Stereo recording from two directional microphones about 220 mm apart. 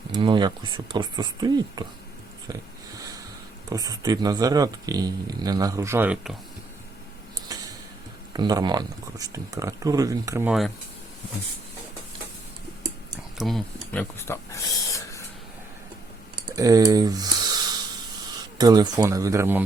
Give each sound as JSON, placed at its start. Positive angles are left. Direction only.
{"t": 0.1, "sound": "speech", "side_deg": -20}
{"t": 2.5, "sound": "a sound", "side_deg": -15}
{"t": 3.7, "sound": "speech", "side_deg": -15}
{"t": 7.5, "sound": "tick-tock", "side_deg": -15}
{"t": 8.3, "sound": "speech", "side_deg": -20}
{"t": 13.4, "sound": "speech", "side_deg": 0}
{"t": 16.5, "sound": "speech", "side_deg": -15}